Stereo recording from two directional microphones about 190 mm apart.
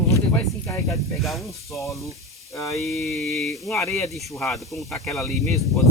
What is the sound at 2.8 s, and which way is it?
Speech, centre (ahead or behind).